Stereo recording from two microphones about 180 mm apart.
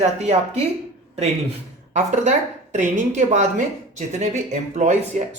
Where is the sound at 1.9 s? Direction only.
40° right (ahead or behind).